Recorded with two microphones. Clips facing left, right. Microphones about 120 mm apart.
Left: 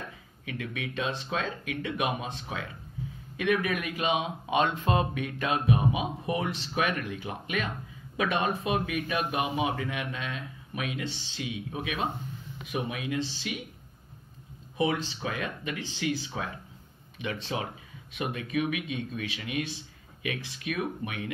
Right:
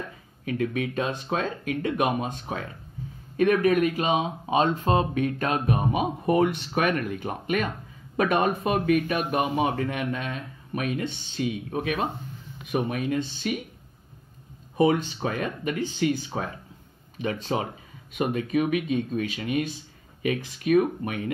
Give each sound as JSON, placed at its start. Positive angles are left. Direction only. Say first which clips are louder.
{"t": 0.5, "sound": "speech", "louder": "right 9 dB", "side_deg": -45}
{"t": 14.8, "sound": "speech", "louder": "right 7 dB", "side_deg": -45}